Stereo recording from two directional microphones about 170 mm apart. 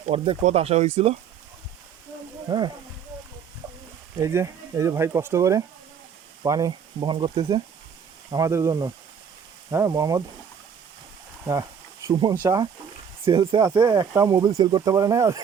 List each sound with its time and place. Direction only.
0.0 s speech: 35° right (ahead or behind)
4.2 s speech: 15° right (ahead or behind)
12.1 s speech: 25° right (ahead or behind)
13.2 s speech: 30° right (ahead or behind)